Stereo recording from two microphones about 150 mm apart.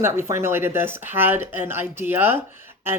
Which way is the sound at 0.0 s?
15° right (ahead or behind).